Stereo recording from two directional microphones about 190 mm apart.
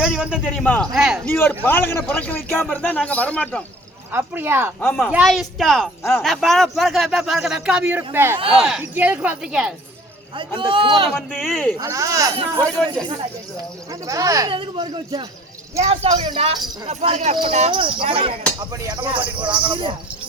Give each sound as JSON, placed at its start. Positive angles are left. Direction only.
{"t": 0.0, "sound": "speech", "side_deg": -5}
{"t": 0.6, "sound": "a man's voice", "side_deg": 10}
{"t": 0.9, "sound": "speech", "side_deg": 0}
{"t": 1.3, "sound": "a man's voice", "side_deg": 10}
{"t": 4.1, "sound": "speech", "side_deg": -10}
{"t": 4.8, "sound": "a man's voice", "side_deg": 10}
{"t": 5.1, "sound": "speech", "side_deg": 0}
{"t": 6.0, "sound": "a man's voice", "side_deg": 10}
{"t": 6.2, "sound": "speech", "side_deg": 0}
{"t": 10.6, "sound": "speech", "side_deg": -25}
{"t": 11.3, "sound": "speech", "side_deg": 0}
{"t": 11.8, "sound": "speech", "side_deg": -15}
{"t": 13.9, "sound": "speech", "side_deg": -15}
{"t": 18.6, "sound": "speech", "side_deg": -15}